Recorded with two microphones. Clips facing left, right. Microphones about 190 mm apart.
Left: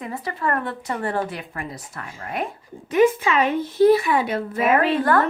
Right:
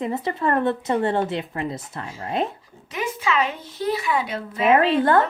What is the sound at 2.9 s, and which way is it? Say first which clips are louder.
A woman's voice: left 7 dB; 50° left (ahead or behind).